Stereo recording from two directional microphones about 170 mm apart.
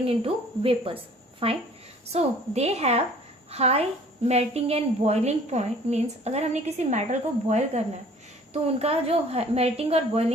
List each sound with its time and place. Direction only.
0.0 s a woman's voice: 35° right (ahead or behind)